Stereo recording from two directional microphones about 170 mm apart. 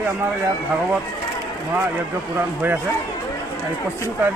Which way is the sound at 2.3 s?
10° right (ahead or behind).